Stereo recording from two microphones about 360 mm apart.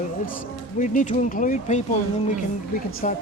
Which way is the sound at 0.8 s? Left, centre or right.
Left.